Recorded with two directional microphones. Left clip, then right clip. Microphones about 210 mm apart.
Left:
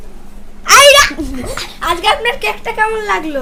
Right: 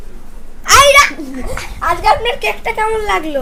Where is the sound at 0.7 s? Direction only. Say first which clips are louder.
Left 1 dB; 15° left (ahead or behind).